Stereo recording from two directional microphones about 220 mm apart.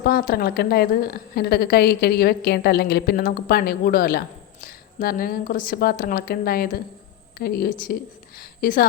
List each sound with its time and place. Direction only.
0.0 s a woman's voice: 40° left (ahead or behind)